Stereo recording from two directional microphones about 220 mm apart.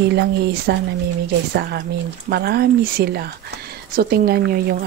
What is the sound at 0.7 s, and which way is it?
A woman's voice, 50° right (ahead or behind).